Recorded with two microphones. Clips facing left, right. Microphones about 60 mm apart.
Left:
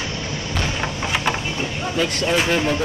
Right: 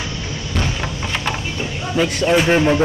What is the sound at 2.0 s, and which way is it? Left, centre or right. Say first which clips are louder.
Speech: right 5 dB; centre.